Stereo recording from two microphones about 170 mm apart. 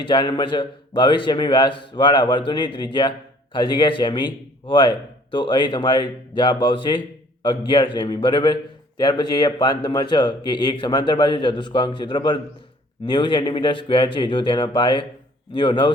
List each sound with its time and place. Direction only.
0.1 s a man's voice: 25° left (ahead or behind)